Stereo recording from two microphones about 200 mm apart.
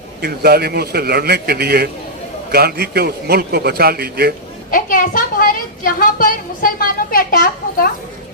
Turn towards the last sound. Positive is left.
turn(degrees=45)  # may be behind; listen again after turning